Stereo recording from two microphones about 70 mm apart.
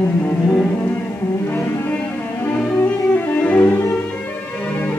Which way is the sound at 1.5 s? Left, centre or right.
Left.